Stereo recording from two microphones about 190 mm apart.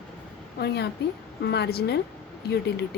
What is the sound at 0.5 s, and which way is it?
A woman's voice, 60° left (ahead or behind).